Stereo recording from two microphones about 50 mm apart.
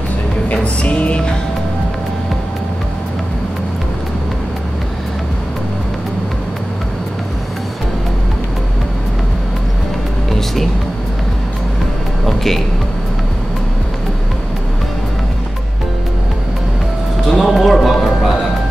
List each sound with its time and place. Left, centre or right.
0.5 s music: left
10.3 s music: centre
12.3 s music: centre
17.3 s music: centre